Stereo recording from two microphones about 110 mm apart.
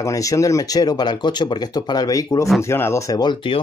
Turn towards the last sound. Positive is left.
turn(degrees=25)  # may be behind; listen again after turning